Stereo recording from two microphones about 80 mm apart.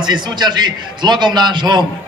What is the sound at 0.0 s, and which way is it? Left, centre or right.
A man's voice, right.